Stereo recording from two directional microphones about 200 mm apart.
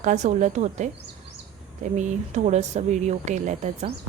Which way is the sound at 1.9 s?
35° right (ahead or behind).